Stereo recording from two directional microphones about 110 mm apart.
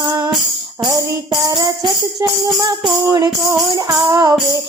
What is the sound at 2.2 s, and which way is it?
Music, 35° right (ahead or behind).